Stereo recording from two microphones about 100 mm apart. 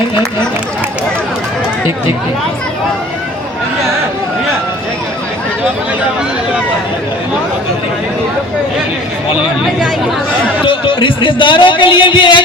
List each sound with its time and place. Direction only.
10.7 s a man's voice: 60° left (ahead or behind)